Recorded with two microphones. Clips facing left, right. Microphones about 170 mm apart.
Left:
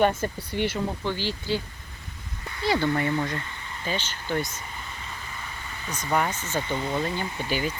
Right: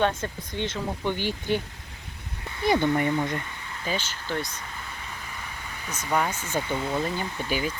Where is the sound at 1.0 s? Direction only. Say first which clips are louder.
Right 4 dB; 15° right (ahead or behind).